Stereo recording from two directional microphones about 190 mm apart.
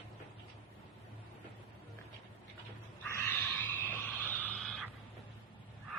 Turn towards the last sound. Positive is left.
turn(degrees=5)  # may be behind; listen again after turning